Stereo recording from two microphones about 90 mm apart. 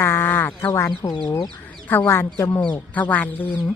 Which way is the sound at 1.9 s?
20° left (ahead or behind).